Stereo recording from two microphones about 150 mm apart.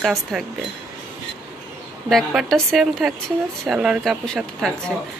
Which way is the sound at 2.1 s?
Centre (ahead or behind).